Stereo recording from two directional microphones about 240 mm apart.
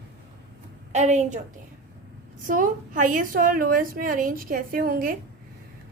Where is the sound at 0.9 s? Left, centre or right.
Right.